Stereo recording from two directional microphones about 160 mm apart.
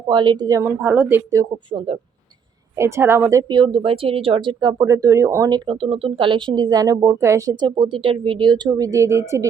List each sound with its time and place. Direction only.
0.1 s a woman's voice: 30° right (ahead or behind)
7.6 s a woman's voice: 30° right (ahead or behind)